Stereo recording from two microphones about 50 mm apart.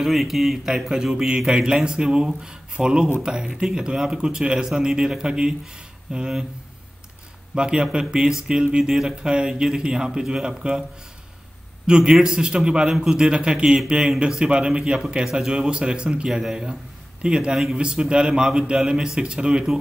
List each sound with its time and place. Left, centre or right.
0.0 s speech: centre
7.5 s speech: centre
11.8 s a man's voice: centre